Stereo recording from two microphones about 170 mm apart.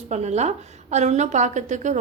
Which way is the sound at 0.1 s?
40° right (ahead or behind).